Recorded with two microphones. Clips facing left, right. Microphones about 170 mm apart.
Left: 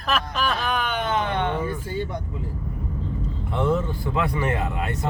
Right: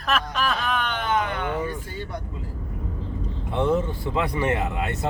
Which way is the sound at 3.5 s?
20° right (ahead or behind).